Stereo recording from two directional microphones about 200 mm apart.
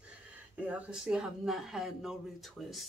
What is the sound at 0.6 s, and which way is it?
Speech, 5° right (ahead or behind).